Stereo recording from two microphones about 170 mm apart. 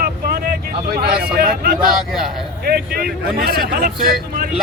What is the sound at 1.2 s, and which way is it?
Vehicle, 60° right (ahead or behind).